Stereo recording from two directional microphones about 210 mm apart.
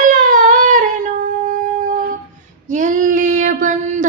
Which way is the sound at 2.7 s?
35° right (ahead or behind).